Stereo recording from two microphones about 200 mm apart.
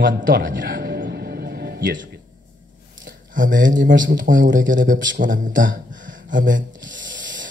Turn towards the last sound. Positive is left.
turn(degrees=-40)  # may be behind; listen again after turning